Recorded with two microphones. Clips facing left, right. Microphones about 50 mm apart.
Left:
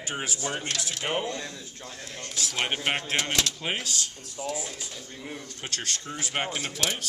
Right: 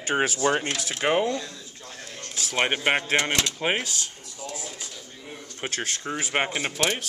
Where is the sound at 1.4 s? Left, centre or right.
Left.